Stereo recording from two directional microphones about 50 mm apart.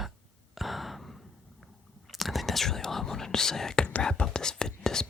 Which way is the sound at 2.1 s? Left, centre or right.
Centre.